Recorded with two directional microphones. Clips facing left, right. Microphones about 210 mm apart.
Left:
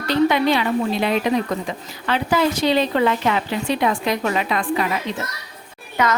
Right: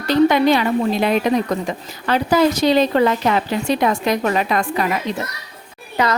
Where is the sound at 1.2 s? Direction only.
40° right (ahead or behind).